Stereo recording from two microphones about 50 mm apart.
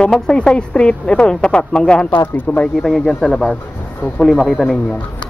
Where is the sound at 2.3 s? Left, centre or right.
Left.